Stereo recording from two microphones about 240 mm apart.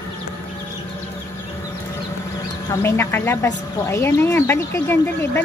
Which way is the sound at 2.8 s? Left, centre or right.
Centre.